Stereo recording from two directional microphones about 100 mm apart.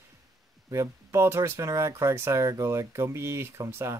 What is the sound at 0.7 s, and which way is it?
Speech, 30° right (ahead or behind).